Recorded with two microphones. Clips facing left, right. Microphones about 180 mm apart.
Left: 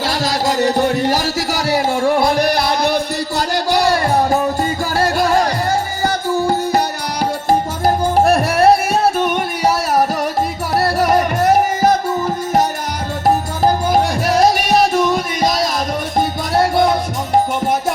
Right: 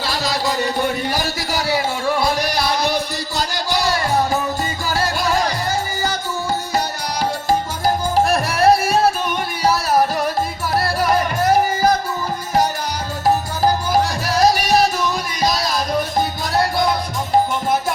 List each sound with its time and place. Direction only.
0.2 s music: 40° left (ahead or behind); by 6.8 s 55° left (ahead or behind)
8.1 s music: 60° left (ahead or behind)
13.8 s music: 55° left (ahead or behind)